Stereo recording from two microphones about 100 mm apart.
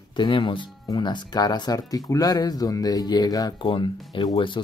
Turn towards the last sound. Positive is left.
turn(degrees=55)  # may be behind; listen again after turning